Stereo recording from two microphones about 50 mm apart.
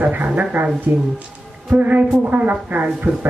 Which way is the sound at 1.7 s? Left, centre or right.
Right.